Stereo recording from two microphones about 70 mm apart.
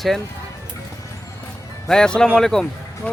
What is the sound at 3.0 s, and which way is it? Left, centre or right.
Speech, centre.